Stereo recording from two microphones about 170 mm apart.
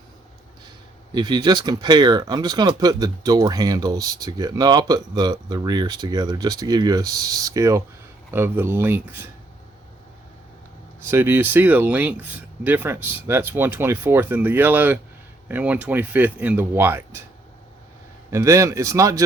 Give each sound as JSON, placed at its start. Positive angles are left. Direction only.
{"t": 1.1, "sound": "speech", "side_deg": -25}
{"t": 11.1, "sound": "speech", "side_deg": -15}
{"t": 18.3, "sound": "speech", "side_deg": -20}